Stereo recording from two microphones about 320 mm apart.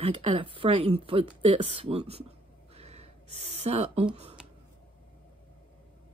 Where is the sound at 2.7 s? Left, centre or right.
Centre.